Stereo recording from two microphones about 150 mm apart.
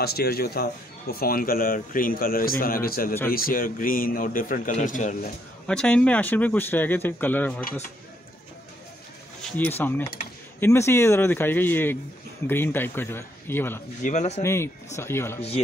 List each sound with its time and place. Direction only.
0.0 s speech: 90° left; by 5.3 s 60° left (ahead or behind)
5.7 s speech: 5° left (ahead or behind)
9.6 s speech: 15° left (ahead or behind)
14.0 s speech: 50° left (ahead or behind)
14.4 s speech: 15° left (ahead or behind)